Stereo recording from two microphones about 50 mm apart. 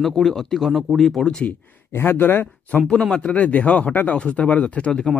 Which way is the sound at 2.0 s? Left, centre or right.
Left.